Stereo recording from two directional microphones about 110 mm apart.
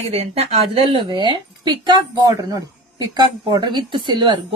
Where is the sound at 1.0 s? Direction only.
45° right (ahead or behind).